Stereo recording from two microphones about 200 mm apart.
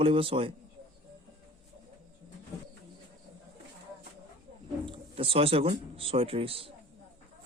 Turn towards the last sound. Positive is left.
turn(degrees=-30)  # may be behind; listen again after turning